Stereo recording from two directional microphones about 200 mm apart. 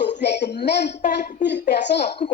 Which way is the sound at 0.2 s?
55° left (ahead or behind).